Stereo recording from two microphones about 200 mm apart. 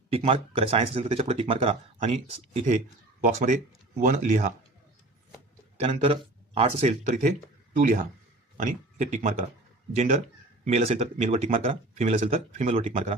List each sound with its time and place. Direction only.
0.1 s speech: 30° right (ahead or behind)
5.8 s speech: 30° right (ahead or behind)
10.6 s speech: 30° right (ahead or behind)